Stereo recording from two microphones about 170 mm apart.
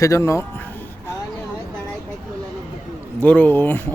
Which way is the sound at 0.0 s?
20° left (ahead or behind).